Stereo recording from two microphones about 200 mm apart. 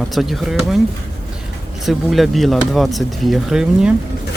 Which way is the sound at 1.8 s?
Centre (ahead or behind).